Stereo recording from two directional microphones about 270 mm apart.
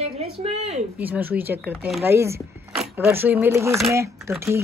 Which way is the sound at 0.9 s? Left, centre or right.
Centre.